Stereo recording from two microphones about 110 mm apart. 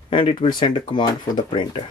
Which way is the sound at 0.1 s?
55° left (ahead or behind).